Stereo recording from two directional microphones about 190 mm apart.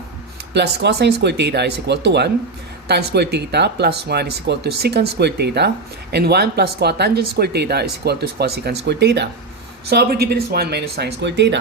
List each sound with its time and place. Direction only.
0.5 s speech: 60° right (ahead or behind)